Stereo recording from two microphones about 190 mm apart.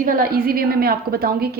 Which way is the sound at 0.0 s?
50° right (ahead or behind).